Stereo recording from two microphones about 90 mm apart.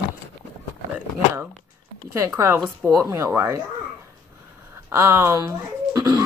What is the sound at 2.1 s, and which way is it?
A woman's voice, 35° right (ahead or behind).